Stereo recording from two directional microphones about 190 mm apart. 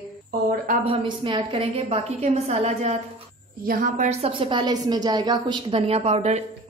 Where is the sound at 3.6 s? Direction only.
50° right (ahead or behind).